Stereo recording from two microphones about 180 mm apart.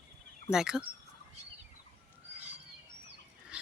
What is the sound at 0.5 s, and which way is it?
Speech, 5° right (ahead or behind).